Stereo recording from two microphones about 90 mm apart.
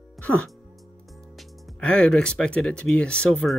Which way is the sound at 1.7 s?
10° left (ahead or behind).